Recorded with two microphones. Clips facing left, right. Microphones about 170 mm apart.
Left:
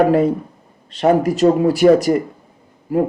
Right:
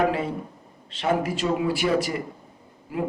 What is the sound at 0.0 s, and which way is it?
A man's voice, 45° left (ahead or behind).